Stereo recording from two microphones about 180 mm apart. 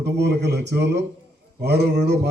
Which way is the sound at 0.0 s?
70° right (ahead or behind).